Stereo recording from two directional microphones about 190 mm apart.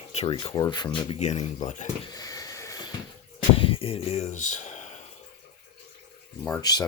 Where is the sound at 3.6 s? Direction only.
30° left (ahead or behind).